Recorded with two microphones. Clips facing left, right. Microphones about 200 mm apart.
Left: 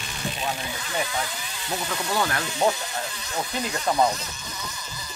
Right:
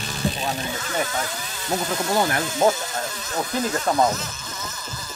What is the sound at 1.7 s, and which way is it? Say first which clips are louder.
Speech: right 5 dB; 40° right (ahead or behind).